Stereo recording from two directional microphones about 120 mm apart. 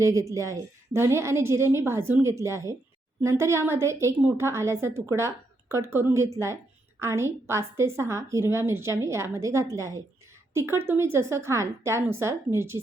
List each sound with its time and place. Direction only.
0.0 s a woman's voice: 25° right (ahead or behind)